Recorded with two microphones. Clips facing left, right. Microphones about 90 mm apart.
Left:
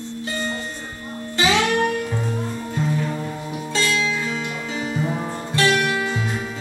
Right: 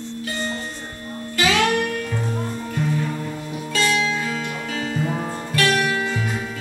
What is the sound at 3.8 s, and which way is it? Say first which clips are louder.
Music: right 2 dB; 25° right (ahead or behind).